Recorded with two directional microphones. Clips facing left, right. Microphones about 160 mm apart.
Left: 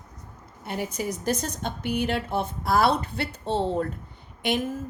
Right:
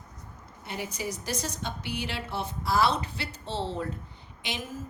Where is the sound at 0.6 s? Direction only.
50° left (ahead or behind).